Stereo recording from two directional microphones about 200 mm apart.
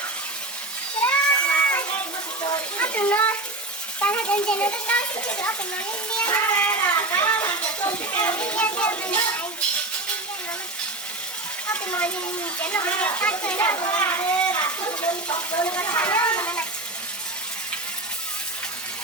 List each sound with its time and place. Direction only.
1.0 s child singing: 10° left (ahead or behind)
2.7 s a sound: 10° left (ahead or behind)
4.0 s speech: 5° left (ahead or behind)
11.7 s speech: 5° left (ahead or behind)
14.8 s speech: 20° left (ahead or behind)
15.6 s speech: 10° left (ahead or behind)